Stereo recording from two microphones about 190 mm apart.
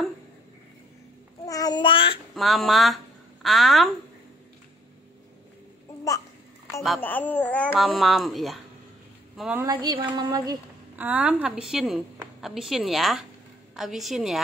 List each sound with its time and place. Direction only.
1.4 s babbling: 20° left (ahead or behind)
2.3 s a woman's voice: centre (ahead or behind)
7.0 s speech: 10° left (ahead or behind)
9.6 s a woman's voice: 20° right (ahead or behind); by 14.4 s centre (ahead or behind)